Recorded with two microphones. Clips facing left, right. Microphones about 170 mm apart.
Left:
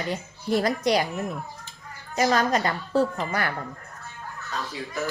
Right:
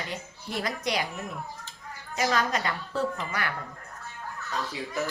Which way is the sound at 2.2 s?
40° left (ahead or behind).